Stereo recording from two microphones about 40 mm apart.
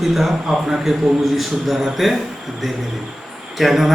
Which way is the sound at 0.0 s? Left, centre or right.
Centre.